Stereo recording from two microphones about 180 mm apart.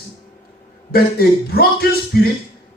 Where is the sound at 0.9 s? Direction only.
60° left (ahead or behind).